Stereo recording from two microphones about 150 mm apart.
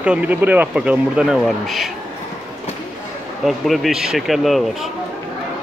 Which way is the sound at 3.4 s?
Centre (ahead or behind).